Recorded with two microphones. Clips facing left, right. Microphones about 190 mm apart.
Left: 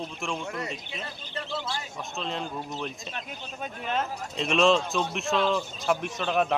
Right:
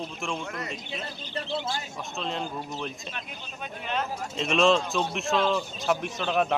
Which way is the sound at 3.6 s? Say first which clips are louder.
Left 1 dB; 40° left (ahead or behind).